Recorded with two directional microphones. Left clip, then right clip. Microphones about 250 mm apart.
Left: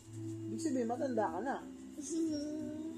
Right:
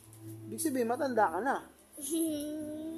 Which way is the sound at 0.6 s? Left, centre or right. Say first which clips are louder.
Right 5 dB; right.